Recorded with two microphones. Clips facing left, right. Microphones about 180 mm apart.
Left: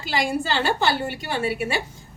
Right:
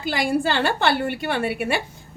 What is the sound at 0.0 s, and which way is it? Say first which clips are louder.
A woman's voice: right 3 dB; 55° right (ahead or behind).